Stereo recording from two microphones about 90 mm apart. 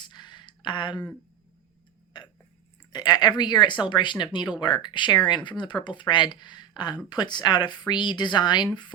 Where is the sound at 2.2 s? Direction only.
60° left (ahead or behind).